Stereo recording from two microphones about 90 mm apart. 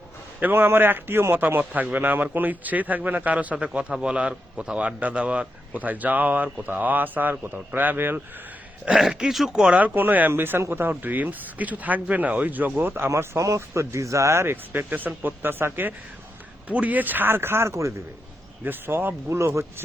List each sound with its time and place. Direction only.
0.3 s a man's voice: 20° right (ahead or behind)
8.8 s speech: 10° right (ahead or behind)
13.1 s a man's voice: 35° right (ahead or behind)